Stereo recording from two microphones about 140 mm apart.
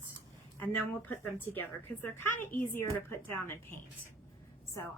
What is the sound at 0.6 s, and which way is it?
A woman's voice, 15° left (ahead or behind).